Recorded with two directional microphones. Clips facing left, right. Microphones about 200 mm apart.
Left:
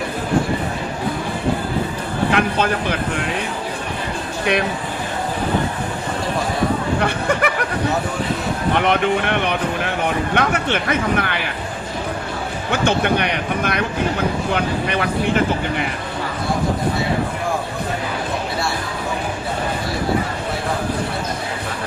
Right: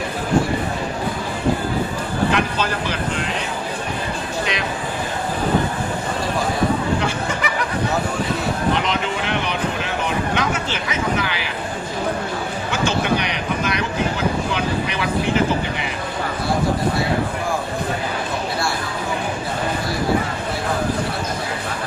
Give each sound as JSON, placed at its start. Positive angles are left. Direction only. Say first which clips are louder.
{"t": 2.3, "sound": "speech", "louder": "left 3 dB", "side_deg": 55}
{"t": 4.5, "sound": "speech", "louder": "left 11 dB", "side_deg": 60}
{"t": 7.0, "sound": "speech", "louder": "left 4 dB", "side_deg": 60}
{"t": 8.7, "sound": "speech", "louder": "left 5 dB", "side_deg": 55}
{"t": 12.7, "sound": "speech", "louder": "left 3 dB", "side_deg": 55}